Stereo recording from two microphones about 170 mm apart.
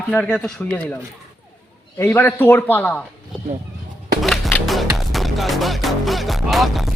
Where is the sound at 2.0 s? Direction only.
10° left (ahead or behind).